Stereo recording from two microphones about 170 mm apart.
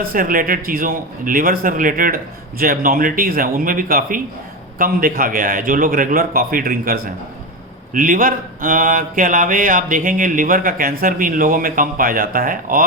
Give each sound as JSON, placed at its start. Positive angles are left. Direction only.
{"t": 0.0, "sound": "speech", "side_deg": -55}